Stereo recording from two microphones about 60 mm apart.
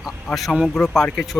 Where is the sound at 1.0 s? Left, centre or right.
Centre.